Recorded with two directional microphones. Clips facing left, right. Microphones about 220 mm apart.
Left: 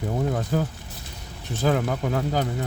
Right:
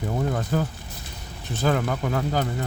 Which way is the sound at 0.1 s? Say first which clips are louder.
Even; 20° left (ahead or behind).